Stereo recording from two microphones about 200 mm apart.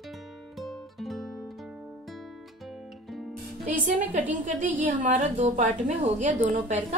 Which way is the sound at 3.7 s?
40° right (ahead or behind).